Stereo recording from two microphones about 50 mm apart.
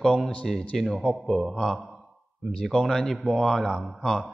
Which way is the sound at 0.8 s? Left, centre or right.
Centre.